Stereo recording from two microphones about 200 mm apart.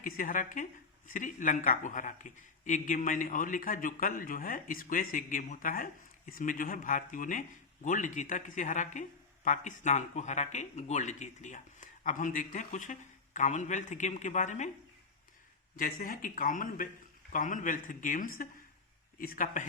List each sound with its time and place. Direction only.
0.0 s speech: 45° left (ahead or behind)
15.7 s speech: 45° left (ahead or behind)